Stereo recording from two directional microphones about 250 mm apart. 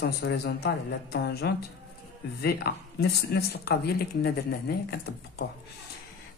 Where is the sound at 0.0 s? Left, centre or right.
Left.